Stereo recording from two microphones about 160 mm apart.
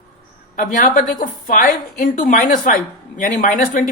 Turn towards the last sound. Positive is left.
turn(degrees=55)  # may be behind; listen again after turning